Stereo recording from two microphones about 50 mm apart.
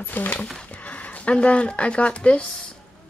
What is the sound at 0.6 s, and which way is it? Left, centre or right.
Speech, left.